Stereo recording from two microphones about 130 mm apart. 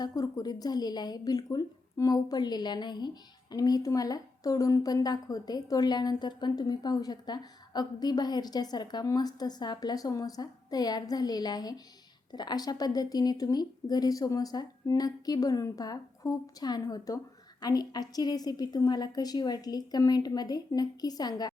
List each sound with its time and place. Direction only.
0.0 s a woman's voice: 30° left (ahead or behind)